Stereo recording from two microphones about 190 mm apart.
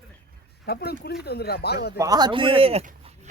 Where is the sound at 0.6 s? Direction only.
60° left (ahead or behind).